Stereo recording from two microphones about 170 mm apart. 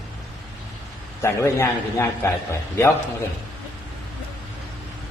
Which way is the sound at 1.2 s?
15° left (ahead or behind).